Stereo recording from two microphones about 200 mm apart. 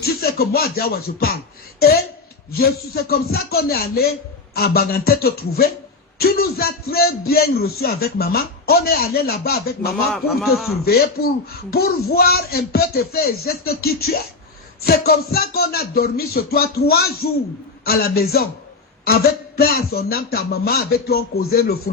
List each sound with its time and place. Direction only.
0.0 s a man's voice: 50° left (ahead or behind)
10.1 s a man's voice: centre (ahead or behind)
10.8 s a man's voice: 50° left (ahead or behind)